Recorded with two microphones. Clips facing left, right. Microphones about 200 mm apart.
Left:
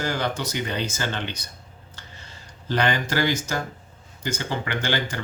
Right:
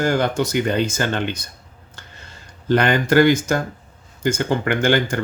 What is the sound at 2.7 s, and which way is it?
Speech, 55° right (ahead or behind).